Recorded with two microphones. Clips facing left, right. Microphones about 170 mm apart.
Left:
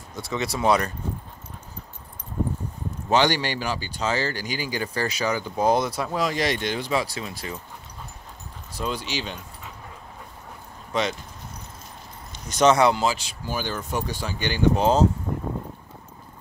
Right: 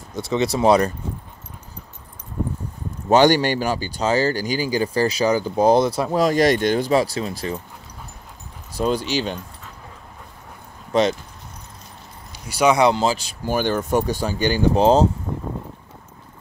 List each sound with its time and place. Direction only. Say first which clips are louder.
0.1 s speech: right 7 dB; 20° right (ahead or behind)
3.1 s speech: right 7 dB; 45° right (ahead or behind)
8.7 s speech: right 8 dB; 40° right (ahead or behind)
10.9 s speech: right 7 dB; 35° right (ahead or behind)
12.4 s speech: right 2 dB; 10° right (ahead or behind); by 13.6 s 40° right (ahead or behind)
13.6 s speech: right 9 dB; 50° right (ahead or behind); by 15.0 s 30° right (ahead or behind)